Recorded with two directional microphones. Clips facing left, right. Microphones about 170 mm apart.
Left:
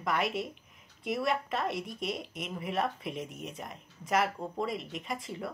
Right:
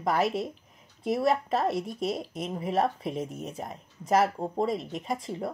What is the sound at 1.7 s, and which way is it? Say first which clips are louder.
Speech: right 6 dB; centre (ahead or behind).